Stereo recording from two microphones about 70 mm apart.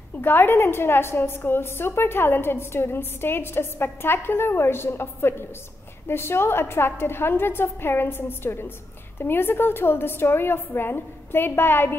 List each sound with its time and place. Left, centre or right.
0.2 s a woman's voice: left